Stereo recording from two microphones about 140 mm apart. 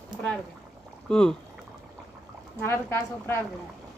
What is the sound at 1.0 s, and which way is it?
Speech, 5° left (ahead or behind).